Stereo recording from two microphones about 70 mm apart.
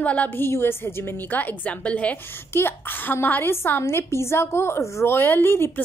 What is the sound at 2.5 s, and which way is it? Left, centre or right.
A woman's voice, left.